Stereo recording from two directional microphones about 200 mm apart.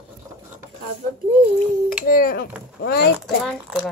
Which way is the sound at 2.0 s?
45° left (ahead or behind).